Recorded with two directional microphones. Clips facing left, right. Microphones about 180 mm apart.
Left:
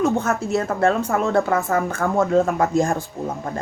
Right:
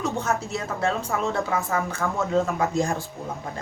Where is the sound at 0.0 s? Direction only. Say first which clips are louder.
Left 6 dB; 60° left (ahead or behind).